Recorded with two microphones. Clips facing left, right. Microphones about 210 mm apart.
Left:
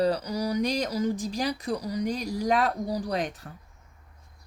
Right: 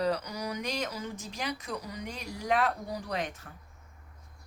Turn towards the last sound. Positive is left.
turn(degrees=35)  # may be behind; listen again after turning